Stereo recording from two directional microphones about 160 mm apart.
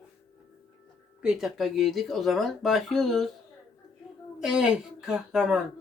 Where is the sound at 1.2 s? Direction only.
Centre (ahead or behind).